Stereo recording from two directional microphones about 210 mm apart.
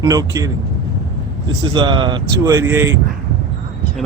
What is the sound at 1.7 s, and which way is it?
Speech, 20° right (ahead or behind).